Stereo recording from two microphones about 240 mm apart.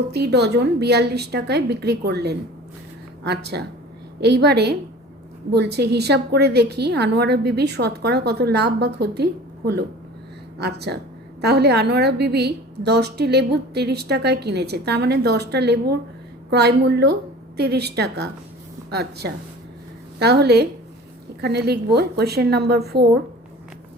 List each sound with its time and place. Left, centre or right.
0.1 s a woman's voice: right